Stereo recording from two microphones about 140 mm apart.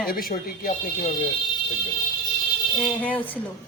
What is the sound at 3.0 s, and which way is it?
Speech, 10° left (ahead or behind).